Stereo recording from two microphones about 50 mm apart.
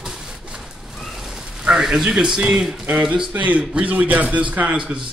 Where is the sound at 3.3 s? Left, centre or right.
Right.